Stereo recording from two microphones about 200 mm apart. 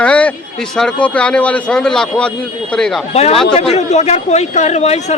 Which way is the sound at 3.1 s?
30° left (ahead or behind).